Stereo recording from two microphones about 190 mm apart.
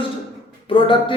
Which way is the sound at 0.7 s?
25° left (ahead or behind).